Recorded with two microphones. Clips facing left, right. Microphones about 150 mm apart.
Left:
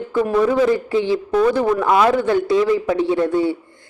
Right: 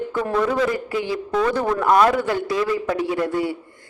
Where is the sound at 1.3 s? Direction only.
10° left (ahead or behind).